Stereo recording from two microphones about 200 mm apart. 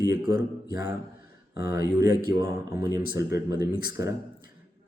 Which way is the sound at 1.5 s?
15° right (ahead or behind).